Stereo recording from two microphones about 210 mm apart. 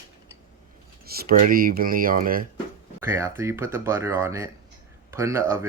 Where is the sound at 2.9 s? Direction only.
10° right (ahead or behind).